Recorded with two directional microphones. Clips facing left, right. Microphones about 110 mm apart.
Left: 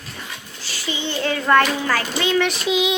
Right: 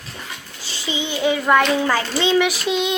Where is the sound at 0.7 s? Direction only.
20° right (ahead or behind).